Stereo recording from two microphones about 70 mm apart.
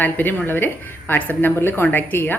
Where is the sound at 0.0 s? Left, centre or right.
Left.